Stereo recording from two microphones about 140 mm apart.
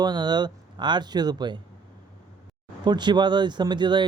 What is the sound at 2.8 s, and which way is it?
Speech, 30° right (ahead or behind).